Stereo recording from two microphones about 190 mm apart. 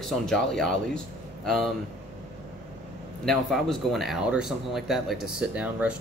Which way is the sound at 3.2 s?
Centre (ahead or behind).